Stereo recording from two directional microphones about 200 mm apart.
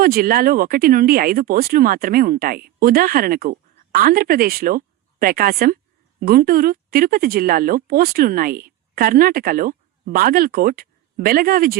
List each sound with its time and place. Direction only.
0.0 s a woman's voice: 50° right (ahead or behind)